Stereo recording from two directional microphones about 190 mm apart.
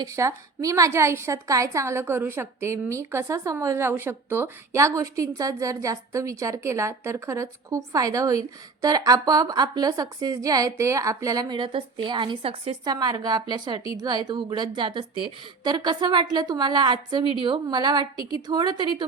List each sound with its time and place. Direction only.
0.0 s a woman's voice: 15° right (ahead or behind)